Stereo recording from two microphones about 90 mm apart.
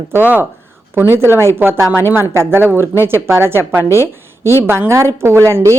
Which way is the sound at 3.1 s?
30° right (ahead or behind).